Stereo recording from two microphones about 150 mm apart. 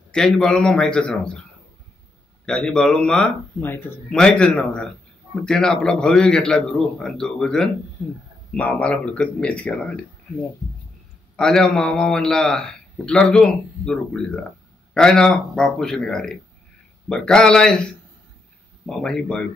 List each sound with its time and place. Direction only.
0.1 s a man's voice: 5° left (ahead or behind)
2.4 s a man's voice: 5° left (ahead or behind)
11.3 s a man's voice: 5° left (ahead or behind)
18.9 s a man's voice: 5° left (ahead or behind)